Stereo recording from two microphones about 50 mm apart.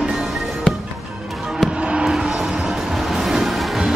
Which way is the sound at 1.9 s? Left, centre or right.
Centre.